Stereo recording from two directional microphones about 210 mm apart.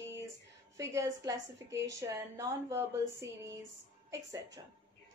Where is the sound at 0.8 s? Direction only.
15° right (ahead or behind).